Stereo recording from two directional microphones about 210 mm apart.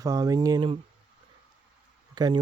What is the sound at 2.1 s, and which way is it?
Speech, 20° right (ahead or behind).